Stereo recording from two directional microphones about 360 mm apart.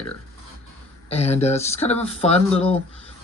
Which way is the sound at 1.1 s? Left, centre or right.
Centre.